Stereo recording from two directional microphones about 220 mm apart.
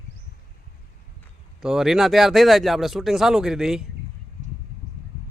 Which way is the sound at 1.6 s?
Centre (ahead or behind).